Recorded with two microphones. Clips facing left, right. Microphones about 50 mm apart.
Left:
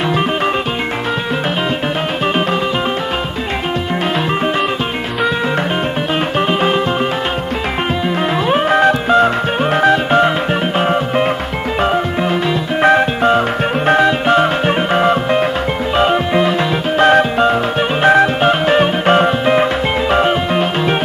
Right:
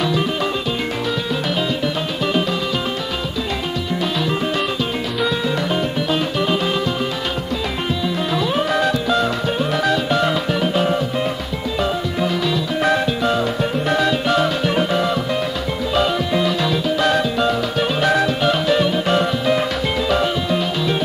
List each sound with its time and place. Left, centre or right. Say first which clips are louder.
8.5 s music: left 8 dB; left